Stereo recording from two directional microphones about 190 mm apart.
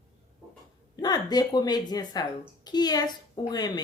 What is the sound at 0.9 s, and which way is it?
Speech, 20° left (ahead or behind).